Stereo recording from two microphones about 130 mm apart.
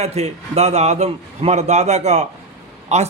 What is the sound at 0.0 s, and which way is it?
A man's voice, 55° right (ahead or behind).